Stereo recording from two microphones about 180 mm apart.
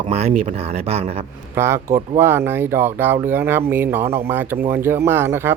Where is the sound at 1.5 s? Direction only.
15° right (ahead or behind).